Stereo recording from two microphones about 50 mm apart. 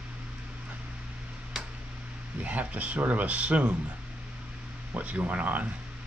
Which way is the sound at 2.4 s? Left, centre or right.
Right.